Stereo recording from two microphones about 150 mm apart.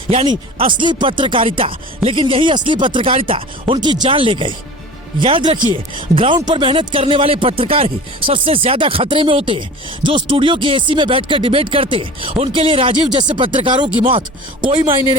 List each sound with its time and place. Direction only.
0.1 s speech: 40° right (ahead or behind)